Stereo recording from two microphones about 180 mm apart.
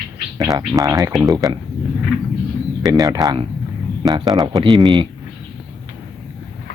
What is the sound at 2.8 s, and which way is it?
Speech, 20° right (ahead or behind).